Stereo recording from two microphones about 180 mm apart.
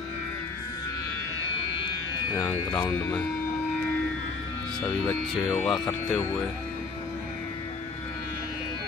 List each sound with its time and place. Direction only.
2.3 s speech: 20° left (ahead or behind)
4.8 s speech: 5° left (ahead or behind)